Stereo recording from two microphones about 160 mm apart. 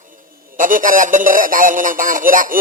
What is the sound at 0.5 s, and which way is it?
Speech, 55° right (ahead or behind).